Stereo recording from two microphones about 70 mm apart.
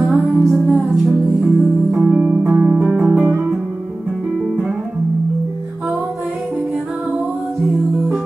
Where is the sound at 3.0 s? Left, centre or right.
Centre.